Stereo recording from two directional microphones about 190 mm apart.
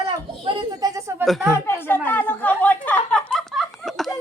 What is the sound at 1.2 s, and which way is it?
Speech, centre (ahead or behind).